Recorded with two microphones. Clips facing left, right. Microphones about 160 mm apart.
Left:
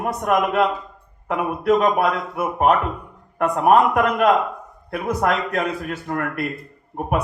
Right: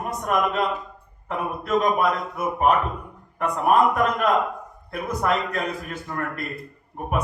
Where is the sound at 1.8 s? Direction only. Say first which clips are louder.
Left 2 dB; 65° left (ahead or behind).